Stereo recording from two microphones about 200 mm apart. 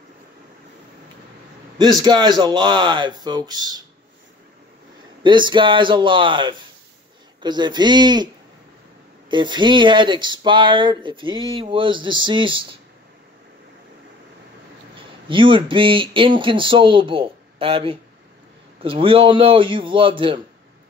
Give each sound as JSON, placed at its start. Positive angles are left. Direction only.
{"t": 1.8, "sound": "speech", "side_deg": -20}
{"t": 5.2, "sound": "speech", "side_deg": -25}
{"t": 9.3, "sound": "speech", "side_deg": -25}
{"t": 15.0, "sound": "speech", "side_deg": -25}